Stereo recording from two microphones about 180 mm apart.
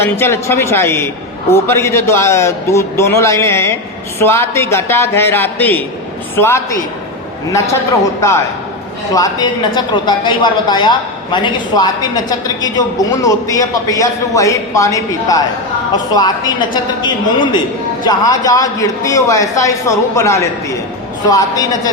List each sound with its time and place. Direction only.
0.0 s a man's voice: 15° left (ahead or behind)
9.1 s a man's voice: 20° left (ahead or behind)